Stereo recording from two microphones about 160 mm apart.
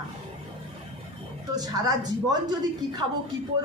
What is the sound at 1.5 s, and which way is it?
A woman's voice, 25° right (ahead or behind).